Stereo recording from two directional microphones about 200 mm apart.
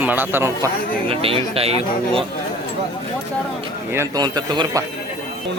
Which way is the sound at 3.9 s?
15° right (ahead or behind).